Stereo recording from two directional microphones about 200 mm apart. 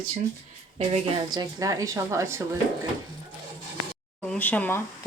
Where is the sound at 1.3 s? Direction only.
20° right (ahead or behind).